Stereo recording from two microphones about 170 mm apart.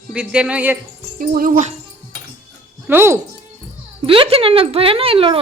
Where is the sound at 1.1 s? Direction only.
55° right (ahead or behind).